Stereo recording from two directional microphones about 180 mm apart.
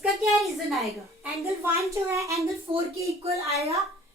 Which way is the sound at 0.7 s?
Centre (ahead or behind).